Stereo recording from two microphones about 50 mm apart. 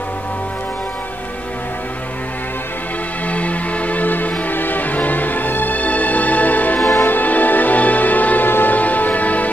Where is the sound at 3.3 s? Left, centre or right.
Left.